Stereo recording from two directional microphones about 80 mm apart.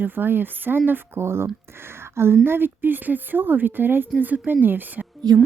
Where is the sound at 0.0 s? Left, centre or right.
Right.